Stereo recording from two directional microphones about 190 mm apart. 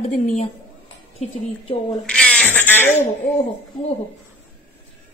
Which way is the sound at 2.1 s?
5° left (ahead or behind).